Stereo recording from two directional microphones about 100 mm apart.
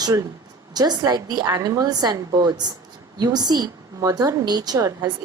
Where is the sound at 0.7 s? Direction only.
40° right (ahead or behind).